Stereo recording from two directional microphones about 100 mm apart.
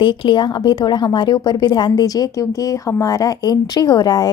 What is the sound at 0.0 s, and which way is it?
A woman's voice, 50° left (ahead or behind).